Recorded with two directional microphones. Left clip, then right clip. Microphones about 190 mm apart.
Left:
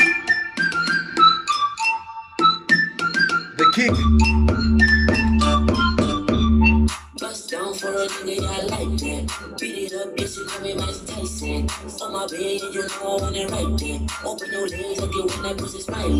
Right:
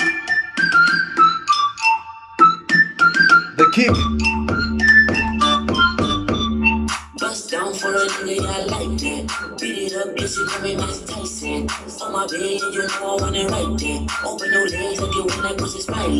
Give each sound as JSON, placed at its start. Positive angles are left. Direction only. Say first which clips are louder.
{"t": 0.3, "sound": "music", "louder": "right 3 dB", "side_deg": 20}
{"t": 3.7, "sound": "music", "louder": "right 1 dB", "side_deg": -10}
{"t": 4.2, "sound": "keyboard", "louder": "right 2 dB", "side_deg": 20}
{"t": 10.2, "sound": "music", "louder": "right 6 dB", "side_deg": 20}